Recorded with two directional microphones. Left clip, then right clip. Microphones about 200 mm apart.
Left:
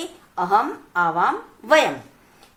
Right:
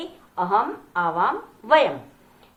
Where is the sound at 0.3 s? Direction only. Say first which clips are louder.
Left 2 dB; 60° left (ahead or behind).